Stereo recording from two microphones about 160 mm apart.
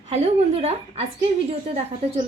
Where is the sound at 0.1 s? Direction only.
40° right (ahead or behind).